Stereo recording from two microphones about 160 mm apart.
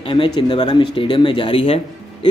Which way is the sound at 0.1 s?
30° left (ahead or behind).